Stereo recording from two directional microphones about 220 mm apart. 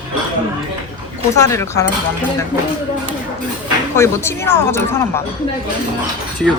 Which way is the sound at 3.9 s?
10° left (ahead or behind).